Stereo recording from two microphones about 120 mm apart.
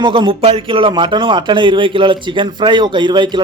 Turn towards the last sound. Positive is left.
turn(degrees=-40)  # may be behind; listen again after turning